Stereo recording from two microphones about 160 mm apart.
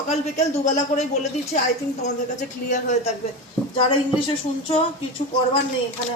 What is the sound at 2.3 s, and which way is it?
Speech, 50° left (ahead or behind).